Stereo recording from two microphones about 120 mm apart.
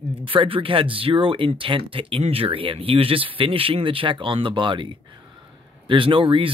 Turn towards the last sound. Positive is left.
turn(degrees=-45)  # may be behind; listen again after turning